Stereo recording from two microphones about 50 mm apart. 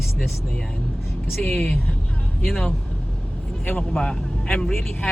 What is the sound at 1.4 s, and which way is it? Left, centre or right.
Speech, left.